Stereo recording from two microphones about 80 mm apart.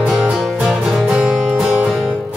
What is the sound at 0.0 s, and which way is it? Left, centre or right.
Music, centre.